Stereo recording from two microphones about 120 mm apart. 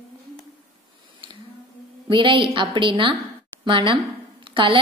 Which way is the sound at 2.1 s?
45° right (ahead or behind).